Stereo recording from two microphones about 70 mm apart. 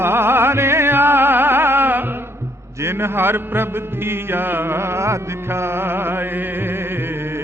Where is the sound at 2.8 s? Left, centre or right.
Right.